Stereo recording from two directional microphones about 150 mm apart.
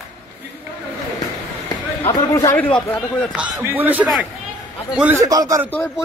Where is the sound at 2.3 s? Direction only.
20° left (ahead or behind).